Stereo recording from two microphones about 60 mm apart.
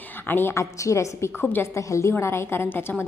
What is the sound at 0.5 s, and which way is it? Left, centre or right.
Speech, left.